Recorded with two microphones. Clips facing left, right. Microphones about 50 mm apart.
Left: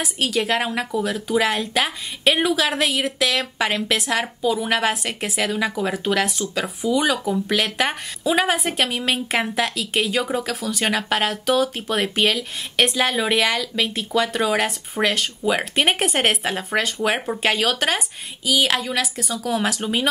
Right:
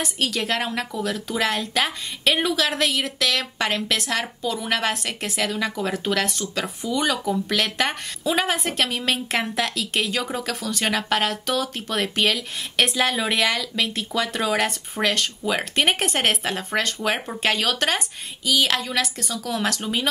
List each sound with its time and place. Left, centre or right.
0.0 s a woman's voice: centre